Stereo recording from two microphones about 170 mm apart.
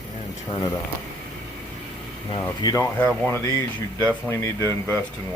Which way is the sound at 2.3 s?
25° left (ahead or behind).